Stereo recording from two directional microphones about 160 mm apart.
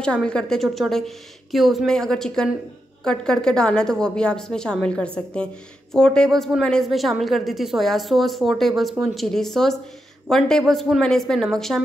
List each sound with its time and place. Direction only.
0.0 s a woman's voice: 5° left (ahead or behind)